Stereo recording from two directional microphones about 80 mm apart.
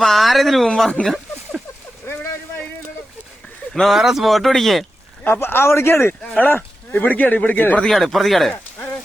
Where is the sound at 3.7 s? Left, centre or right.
Centre.